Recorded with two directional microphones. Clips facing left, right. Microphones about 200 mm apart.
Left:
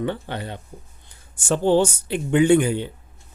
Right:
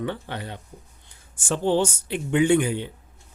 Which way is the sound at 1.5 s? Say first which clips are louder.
Left 4 dB; 40° left (ahead or behind).